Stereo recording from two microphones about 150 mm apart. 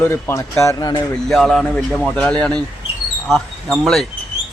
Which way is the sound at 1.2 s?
Centre (ahead or behind).